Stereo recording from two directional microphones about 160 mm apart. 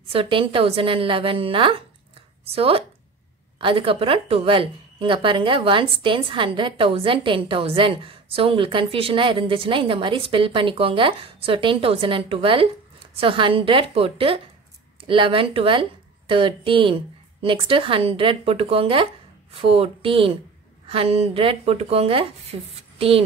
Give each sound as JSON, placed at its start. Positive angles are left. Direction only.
{"t": 0.1, "sound": "a woman's voice", "side_deg": -35}